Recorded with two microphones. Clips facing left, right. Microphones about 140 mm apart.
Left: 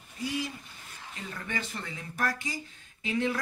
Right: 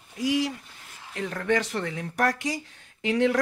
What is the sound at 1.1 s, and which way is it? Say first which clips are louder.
Speech: right 12 dB; 70° right (ahead or behind).